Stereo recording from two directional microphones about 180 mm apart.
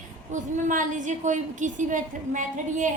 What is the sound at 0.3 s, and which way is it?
A woman's voice, 45° right (ahead or behind).